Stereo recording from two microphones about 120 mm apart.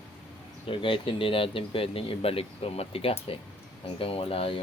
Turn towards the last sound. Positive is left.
turn(degrees=50)  # may be behind; listen again after turning